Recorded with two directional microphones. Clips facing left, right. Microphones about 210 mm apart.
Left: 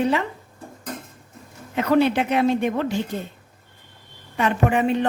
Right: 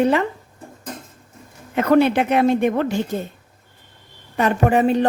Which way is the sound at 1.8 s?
55° right (ahead or behind).